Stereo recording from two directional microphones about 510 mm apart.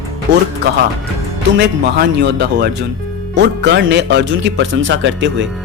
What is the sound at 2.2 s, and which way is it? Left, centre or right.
Speech, centre.